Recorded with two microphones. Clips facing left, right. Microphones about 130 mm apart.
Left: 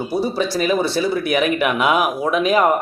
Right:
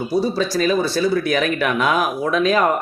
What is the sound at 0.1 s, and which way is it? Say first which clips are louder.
Speech: right 1 dB; 15° left (ahead or behind).